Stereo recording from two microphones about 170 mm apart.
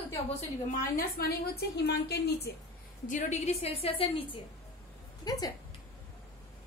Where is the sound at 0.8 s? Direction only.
60° left (ahead or behind).